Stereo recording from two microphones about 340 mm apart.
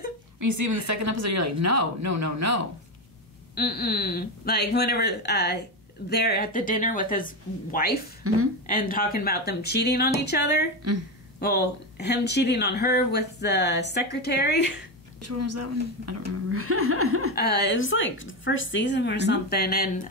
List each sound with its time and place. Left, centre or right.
0.4 s speech: right
3.5 s speech: left
8.2 s a woman's voice: right
8.6 s speech: left
15.2 s a woman's voice: right
17.4 s a woman's voice: left